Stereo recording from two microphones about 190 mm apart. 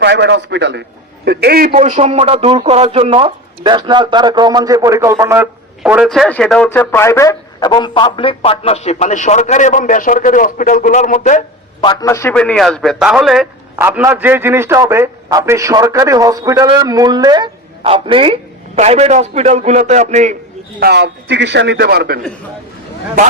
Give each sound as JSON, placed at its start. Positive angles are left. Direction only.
{"t": 0.0, "sound": "a man's voice", "side_deg": -65}
{"t": 1.7, "sound": "a man's voice", "side_deg": -35}
{"t": 5.8, "sound": "speech", "side_deg": -5}
{"t": 11.8, "sound": "a man's voice", "side_deg": 20}
{"t": 13.8, "sound": "a man's voice", "side_deg": -10}
{"t": 20.7, "sound": "a man's voice", "side_deg": -60}